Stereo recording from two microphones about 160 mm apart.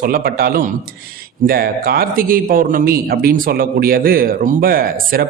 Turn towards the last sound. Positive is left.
turn(degrees=-65)  # may be behind; listen again after turning